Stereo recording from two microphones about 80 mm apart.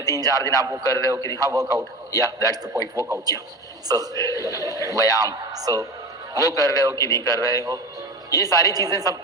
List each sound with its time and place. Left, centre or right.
0.0 s a man's voice: right